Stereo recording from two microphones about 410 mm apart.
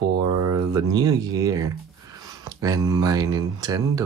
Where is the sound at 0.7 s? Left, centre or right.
Centre.